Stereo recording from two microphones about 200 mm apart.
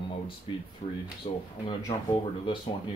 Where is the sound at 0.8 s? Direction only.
20° left (ahead or behind).